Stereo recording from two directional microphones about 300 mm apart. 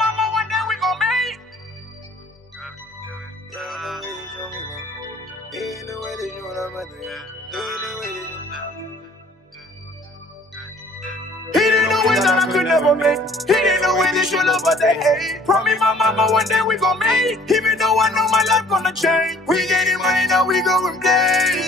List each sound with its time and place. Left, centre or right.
0.0 s music: centre
3.5 s music: centre
10.5 s music: centre